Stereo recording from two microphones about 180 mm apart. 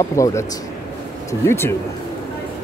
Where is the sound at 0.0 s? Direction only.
15° left (ahead or behind).